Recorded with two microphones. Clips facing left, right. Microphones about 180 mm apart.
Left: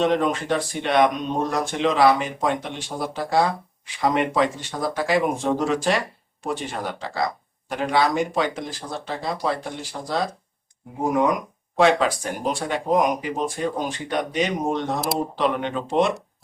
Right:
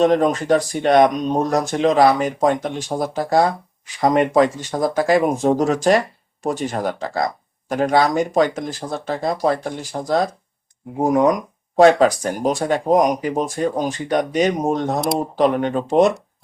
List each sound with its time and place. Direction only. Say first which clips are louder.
0.0 s speech: right 5 dB; 40° right (ahead or behind)